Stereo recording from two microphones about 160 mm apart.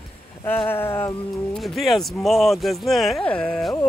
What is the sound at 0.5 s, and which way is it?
Speech, 15° left (ahead or behind).